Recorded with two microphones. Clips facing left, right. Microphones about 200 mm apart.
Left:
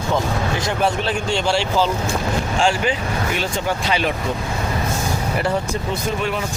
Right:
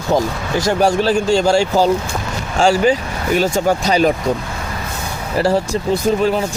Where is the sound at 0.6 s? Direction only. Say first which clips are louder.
Right 10 dB; 40° right (ahead or behind).